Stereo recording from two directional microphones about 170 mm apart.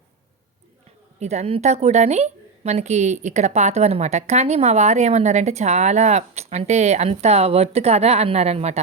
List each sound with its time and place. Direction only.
1.2 s a woman's voice: 40° right (ahead or behind)